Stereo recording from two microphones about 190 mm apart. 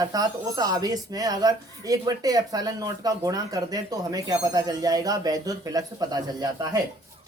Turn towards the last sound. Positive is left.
turn(degrees=-20)  # may be behind; listen again after turning